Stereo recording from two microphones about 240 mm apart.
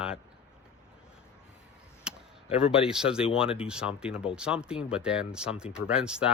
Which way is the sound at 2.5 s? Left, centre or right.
Centre.